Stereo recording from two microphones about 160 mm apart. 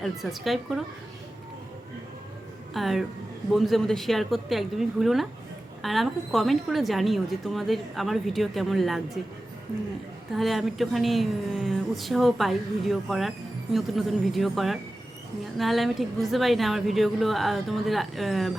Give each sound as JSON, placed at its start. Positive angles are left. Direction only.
{"t": 0.0, "sound": "a woman's voice", "side_deg": 0}
{"t": 2.7, "sound": "a woman's voice", "side_deg": 0}
{"t": 10.3, "sound": "a woman's voice", "side_deg": 0}